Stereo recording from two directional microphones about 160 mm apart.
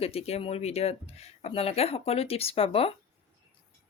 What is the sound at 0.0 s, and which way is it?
Speech, 40° left (ahead or behind).